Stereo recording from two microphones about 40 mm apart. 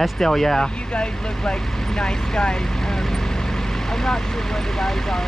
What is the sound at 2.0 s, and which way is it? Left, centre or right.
Speech, left.